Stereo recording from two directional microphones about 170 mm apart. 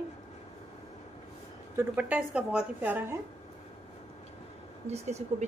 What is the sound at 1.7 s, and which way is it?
A woman's voice, 10° right (ahead or behind).